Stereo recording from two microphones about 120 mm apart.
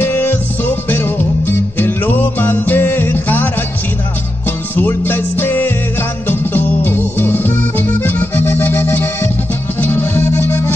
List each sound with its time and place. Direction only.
0.0 s music: 15° left (ahead or behind)
4.5 s music: 15° left (ahead or behind)